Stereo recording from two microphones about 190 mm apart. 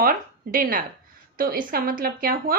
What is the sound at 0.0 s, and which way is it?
A woman's voice, 45° right (ahead or behind).